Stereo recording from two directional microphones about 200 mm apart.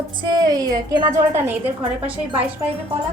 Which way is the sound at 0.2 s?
20° right (ahead or behind).